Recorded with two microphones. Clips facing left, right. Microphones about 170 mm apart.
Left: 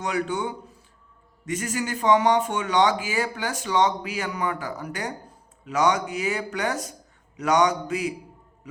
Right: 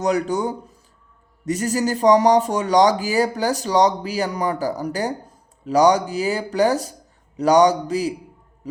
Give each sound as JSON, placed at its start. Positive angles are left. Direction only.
{"t": 0.0, "sound": "speech", "side_deg": -40}
{"t": 8.7, "sound": "music", "side_deg": -35}